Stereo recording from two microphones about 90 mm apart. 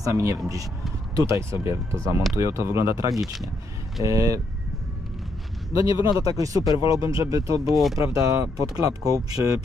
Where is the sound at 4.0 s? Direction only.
40° right (ahead or behind).